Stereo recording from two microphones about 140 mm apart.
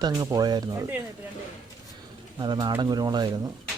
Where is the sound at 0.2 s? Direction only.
25° right (ahead or behind).